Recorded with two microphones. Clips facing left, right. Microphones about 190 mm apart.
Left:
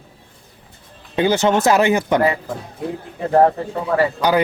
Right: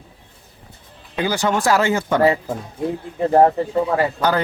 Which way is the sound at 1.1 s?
25° left (ahead or behind).